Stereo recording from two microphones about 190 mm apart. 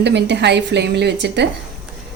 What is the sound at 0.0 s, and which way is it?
A woman's voice, 65° right (ahead or behind).